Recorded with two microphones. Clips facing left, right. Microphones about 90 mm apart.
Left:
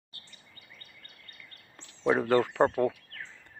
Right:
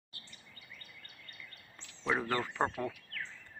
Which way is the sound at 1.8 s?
35° left (ahead or behind).